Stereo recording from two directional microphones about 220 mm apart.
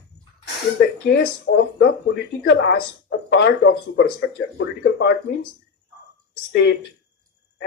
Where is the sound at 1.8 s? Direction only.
50° left (ahead or behind).